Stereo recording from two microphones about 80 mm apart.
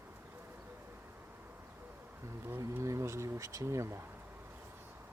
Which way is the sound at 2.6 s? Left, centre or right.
Right.